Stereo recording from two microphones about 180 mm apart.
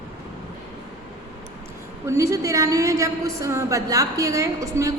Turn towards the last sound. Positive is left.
turn(degrees=-15)  # may be behind; listen again after turning